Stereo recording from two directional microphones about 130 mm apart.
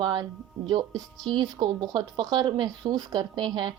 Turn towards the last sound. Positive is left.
turn(degrees=-35)  # may be behind; listen again after turning